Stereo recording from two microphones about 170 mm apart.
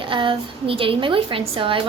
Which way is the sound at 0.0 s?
30° right (ahead or behind).